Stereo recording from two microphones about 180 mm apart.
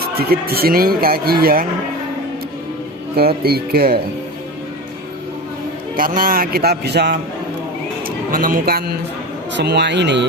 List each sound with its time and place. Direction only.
0.0 s a man's voice: 60° right (ahead or behind)
3.2 s a man's voice: 60° right (ahead or behind)
6.0 s a man's voice: 50° right (ahead or behind)
8.3 s speech: 50° right (ahead or behind)
9.5 s speech: 75° right (ahead or behind)